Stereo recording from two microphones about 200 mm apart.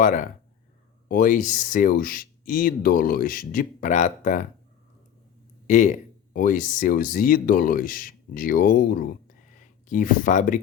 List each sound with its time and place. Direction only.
0.0 s speech: 40° left (ahead or behind)
5.6 s speech: 40° left (ahead or behind)